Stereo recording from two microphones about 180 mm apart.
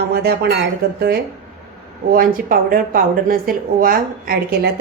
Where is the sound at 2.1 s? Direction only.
50° right (ahead or behind).